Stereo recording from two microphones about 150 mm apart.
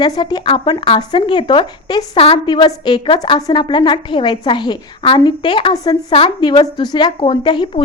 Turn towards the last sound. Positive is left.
turn(degrees=30)  # may be behind; listen again after turning